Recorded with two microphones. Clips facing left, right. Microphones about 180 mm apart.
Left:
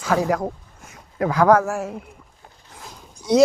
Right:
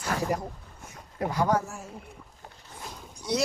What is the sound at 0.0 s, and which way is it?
Speech, 90° left.